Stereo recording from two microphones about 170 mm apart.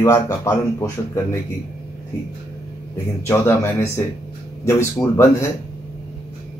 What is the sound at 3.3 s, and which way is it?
Speech, 15° left (ahead or behind).